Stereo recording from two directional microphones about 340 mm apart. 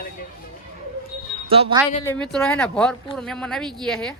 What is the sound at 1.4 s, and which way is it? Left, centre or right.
Speech, centre.